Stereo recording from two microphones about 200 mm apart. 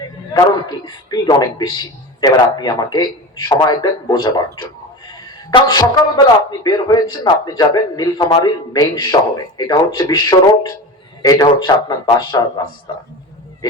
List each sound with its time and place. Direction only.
0.3 s speech: 20° left (ahead or behind)
5.1 s a sound: 20° left (ahead or behind)
5.9 s speech: 20° left (ahead or behind)